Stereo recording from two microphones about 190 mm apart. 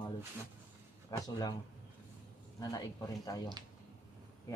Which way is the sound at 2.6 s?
20° left (ahead or behind).